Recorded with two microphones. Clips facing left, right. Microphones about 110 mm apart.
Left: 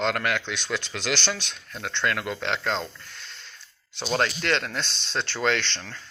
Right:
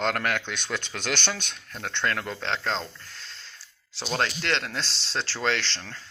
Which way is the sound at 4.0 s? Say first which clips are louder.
Left 3 dB; 15° left (ahead or behind).